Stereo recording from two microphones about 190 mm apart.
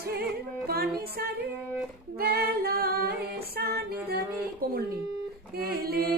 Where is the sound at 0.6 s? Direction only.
55° right (ahead or behind).